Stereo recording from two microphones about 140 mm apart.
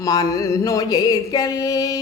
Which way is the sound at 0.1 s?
25° left (ahead or behind).